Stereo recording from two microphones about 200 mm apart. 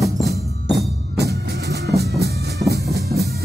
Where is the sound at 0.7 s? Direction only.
55° right (ahead or behind).